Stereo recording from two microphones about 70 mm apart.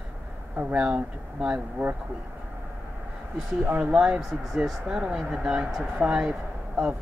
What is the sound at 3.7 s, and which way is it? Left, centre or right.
Speech, centre.